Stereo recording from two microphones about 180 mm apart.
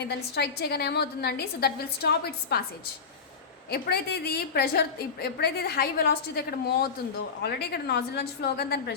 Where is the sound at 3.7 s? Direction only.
60° left (ahead or behind).